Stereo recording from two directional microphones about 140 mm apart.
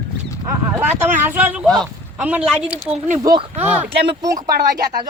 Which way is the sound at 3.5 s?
15° right (ahead or behind).